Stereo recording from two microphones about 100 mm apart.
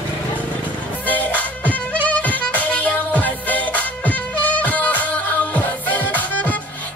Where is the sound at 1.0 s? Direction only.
15° left (ahead or behind).